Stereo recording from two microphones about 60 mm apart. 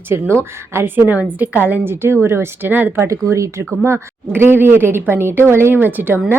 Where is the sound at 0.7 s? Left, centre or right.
Right.